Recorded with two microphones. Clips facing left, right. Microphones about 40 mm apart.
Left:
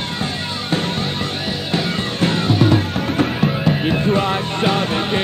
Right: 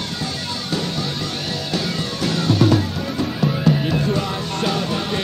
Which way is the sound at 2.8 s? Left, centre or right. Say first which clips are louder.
Left 4 dB; left.